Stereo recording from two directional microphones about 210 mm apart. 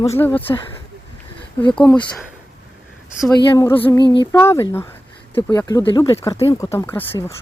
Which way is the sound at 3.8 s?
15° left (ahead or behind).